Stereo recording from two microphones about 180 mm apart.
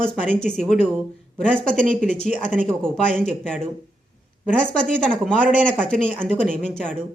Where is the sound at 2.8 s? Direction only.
5° left (ahead or behind).